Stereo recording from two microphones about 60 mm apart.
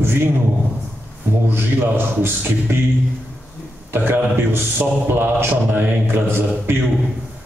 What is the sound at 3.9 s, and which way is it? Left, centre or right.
A man's voice, right.